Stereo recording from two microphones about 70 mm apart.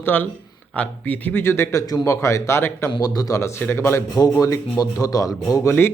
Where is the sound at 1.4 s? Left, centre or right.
Left.